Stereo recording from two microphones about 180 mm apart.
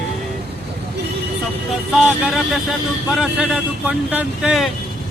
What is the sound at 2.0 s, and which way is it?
Speech, 5° right (ahead or behind).